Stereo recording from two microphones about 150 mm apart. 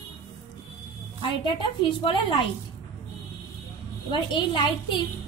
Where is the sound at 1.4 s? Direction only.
35° left (ahead or behind).